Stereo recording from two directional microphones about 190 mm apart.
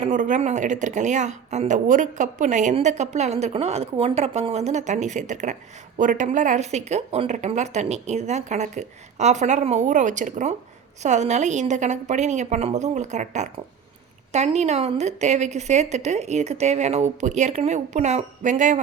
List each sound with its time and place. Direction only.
0.0 s a woman's voice: 40° right (ahead or behind)